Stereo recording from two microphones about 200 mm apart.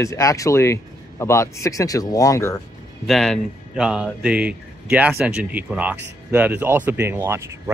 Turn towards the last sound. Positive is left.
turn(degrees=-10)  # may be behind; listen again after turning